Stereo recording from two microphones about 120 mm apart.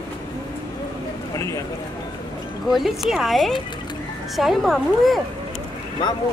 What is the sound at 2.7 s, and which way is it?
Speech, centre (ahead or behind).